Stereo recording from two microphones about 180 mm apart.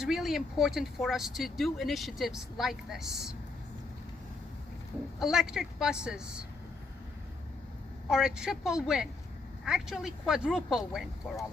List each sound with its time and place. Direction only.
0.0 s speech: centre (ahead or behind)
5.2 s speech: 5° right (ahead or behind)
8.1 s speech: 5° right (ahead or behind)